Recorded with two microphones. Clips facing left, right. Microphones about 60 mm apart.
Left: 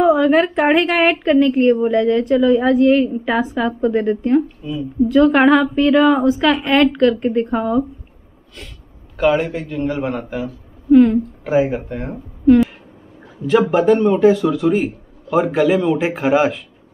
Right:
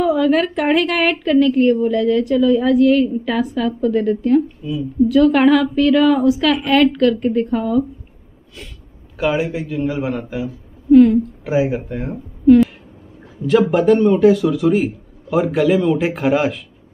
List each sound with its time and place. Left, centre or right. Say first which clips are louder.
0.0 s a woman's voice: left 2 dB; centre
1.0 s a woman's voice: left 1 dB; left
1.4 s a woman's voice: right 1 dB; centre; by 4.5 s left
4.6 s speech: right 1 dB; centre
5.2 s speech: left 1 dB; centre
6.8 s a woman's voice: even; centre
9.1 s speech: left 3 dB; centre
11.4 s speech: left 1 dB; centre